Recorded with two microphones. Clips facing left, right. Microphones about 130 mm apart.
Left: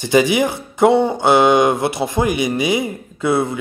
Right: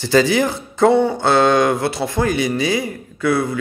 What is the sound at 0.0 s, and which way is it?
Speech, 15° left (ahead or behind).